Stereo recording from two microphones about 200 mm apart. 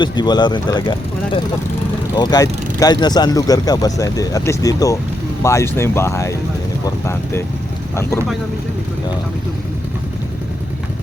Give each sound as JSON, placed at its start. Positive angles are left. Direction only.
{"t": 0.0, "sound": "speech", "side_deg": 20}